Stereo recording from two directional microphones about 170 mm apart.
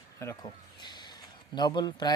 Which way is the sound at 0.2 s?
20° left (ahead or behind).